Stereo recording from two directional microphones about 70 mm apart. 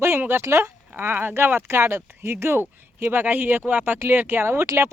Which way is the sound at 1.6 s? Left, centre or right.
Right.